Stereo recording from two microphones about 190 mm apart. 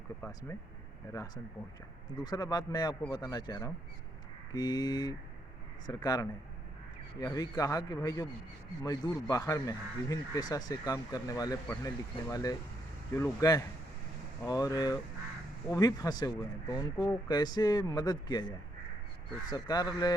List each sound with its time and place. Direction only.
0.2 s a man's voice: 15° left (ahead or behind)
19.5 s speech: 20° left (ahead or behind)